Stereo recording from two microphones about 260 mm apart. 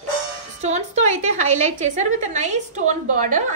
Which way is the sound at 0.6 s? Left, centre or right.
Right.